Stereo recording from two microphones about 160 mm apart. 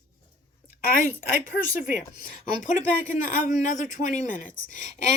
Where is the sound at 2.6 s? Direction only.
55° left (ahead or behind).